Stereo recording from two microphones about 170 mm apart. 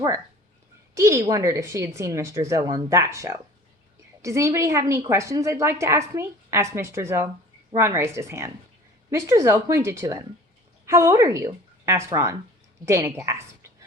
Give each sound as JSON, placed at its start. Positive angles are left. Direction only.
{"t": 0.9, "sound": "a woman's voice", "side_deg": -15}